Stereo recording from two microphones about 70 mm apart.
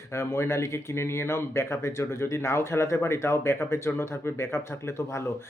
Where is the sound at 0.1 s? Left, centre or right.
Left.